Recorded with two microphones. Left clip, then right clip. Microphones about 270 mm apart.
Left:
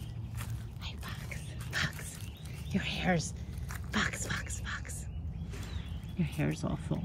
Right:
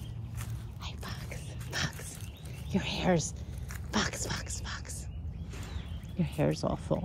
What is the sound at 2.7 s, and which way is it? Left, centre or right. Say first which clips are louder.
Speech: right 2 dB; centre.